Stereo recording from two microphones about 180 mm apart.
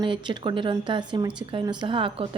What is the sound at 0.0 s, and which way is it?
A woman's voice, 25° right (ahead or behind).